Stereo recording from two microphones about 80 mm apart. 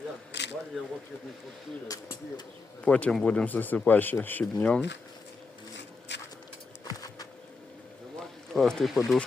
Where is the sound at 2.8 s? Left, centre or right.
Centre.